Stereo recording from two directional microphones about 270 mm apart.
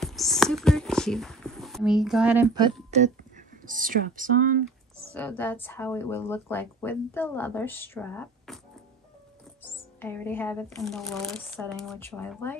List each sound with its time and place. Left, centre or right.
0.0 s a sound: centre
2.5 s speech: right
4.6 s speech: centre
9.6 s speech: centre